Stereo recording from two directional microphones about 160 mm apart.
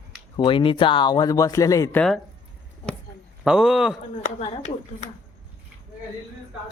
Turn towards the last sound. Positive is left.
turn(degrees=45)  # may be behind; listen again after turning